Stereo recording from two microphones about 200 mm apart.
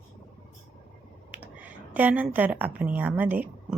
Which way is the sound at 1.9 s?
10° right (ahead or behind).